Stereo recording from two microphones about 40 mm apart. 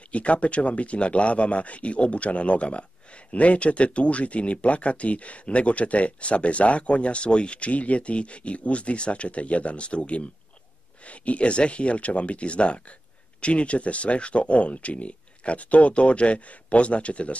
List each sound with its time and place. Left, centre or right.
0.1 s speech: left